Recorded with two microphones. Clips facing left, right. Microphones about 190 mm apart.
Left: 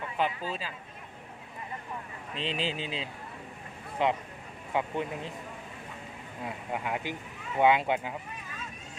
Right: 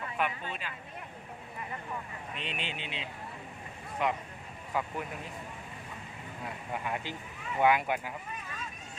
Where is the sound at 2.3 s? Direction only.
30° left (ahead or behind).